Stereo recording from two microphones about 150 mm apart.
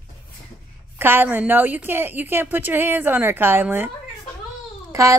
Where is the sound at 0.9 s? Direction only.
15° right (ahead or behind).